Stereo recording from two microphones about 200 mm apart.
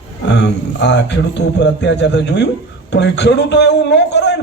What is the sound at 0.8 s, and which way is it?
A man's voice, 60° left (ahead or behind).